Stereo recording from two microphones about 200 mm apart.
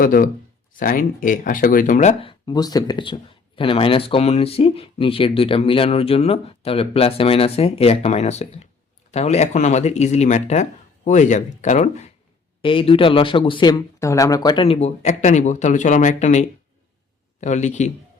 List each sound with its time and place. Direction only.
0.0 s speech: 45° left (ahead or behind)
2.5 s speech: 20° left (ahead or behind); by 12.0 s 35° left (ahead or behind)
12.6 s speech: 25° left (ahead or behind)